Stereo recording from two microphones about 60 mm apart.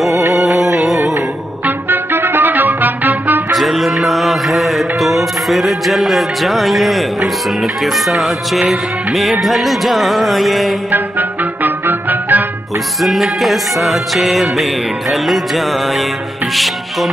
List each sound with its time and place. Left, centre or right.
0.9 s music: right
1.9 s music: right
3.5 s music: centre
10.9 s music: right
13.0 s music: centre